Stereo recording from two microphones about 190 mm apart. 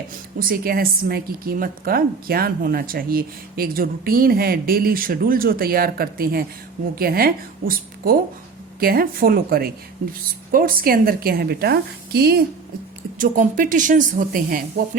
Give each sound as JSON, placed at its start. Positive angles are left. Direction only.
{"t": 0.3, "sound": "a woman's voice", "side_deg": -50}
{"t": 13.1, "sound": "a woman's voice", "side_deg": -45}